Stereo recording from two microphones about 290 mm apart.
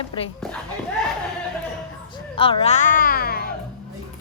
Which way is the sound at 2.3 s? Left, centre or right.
Centre.